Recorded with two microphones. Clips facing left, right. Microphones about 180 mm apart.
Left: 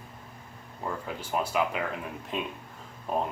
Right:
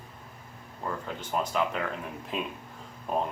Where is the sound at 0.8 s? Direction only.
10° left (ahead or behind).